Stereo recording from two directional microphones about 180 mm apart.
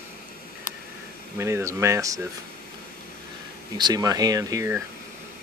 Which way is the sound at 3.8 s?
20° right (ahead or behind).